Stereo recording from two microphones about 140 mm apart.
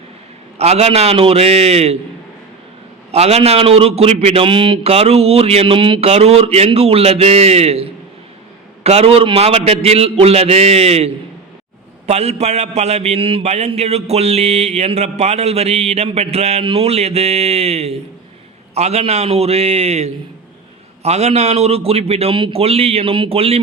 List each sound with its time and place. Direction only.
0.6 s a man's voice: 50° right (ahead or behind)
3.1 s a man's voice: 50° right (ahead or behind)
4.4 s a man's voice: 35° right (ahead or behind)